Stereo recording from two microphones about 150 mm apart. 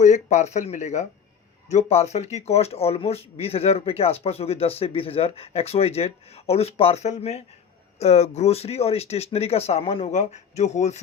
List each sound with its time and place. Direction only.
0.0 s speech: 50° left (ahead or behind)